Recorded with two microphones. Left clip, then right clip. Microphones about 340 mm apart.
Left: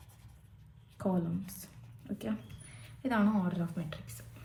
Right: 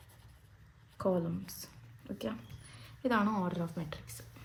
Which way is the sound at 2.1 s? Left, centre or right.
Right.